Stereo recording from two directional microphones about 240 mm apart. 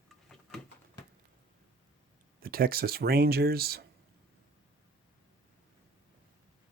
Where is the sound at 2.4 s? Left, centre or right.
Right.